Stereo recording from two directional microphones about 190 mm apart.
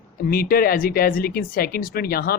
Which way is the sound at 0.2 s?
50° left (ahead or behind).